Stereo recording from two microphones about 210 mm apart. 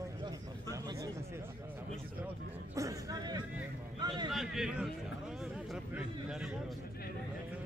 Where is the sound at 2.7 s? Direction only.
15° right (ahead or behind).